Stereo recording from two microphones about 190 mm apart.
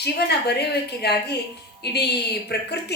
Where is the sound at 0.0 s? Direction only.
60° left (ahead or behind).